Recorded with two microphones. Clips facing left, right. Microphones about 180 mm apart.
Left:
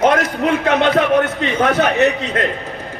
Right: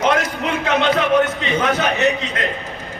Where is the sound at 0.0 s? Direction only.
55° left (ahead or behind).